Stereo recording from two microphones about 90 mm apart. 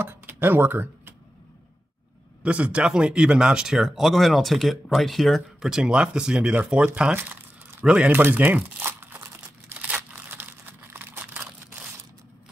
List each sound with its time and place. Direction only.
0.0 s speech: 25° right (ahead or behind)
2.4 s speech: 15° right (ahead or behind)
7.8 s crumpling: 15° right (ahead or behind)